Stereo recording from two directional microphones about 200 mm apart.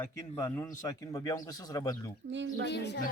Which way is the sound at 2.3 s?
65° right (ahead or behind).